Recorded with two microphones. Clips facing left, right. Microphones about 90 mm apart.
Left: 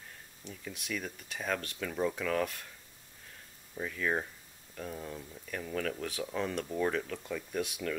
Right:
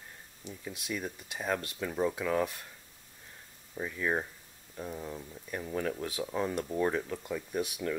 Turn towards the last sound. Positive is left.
turn(degrees=-15)  # may be behind; listen again after turning